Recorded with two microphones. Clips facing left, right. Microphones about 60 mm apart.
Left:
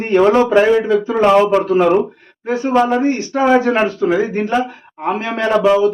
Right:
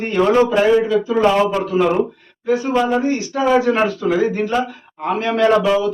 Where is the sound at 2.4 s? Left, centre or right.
Left.